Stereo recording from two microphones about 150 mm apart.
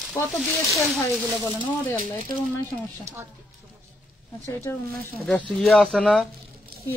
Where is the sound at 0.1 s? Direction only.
Centre (ahead or behind).